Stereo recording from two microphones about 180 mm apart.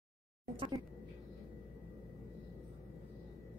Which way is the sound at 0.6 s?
20° right (ahead or behind).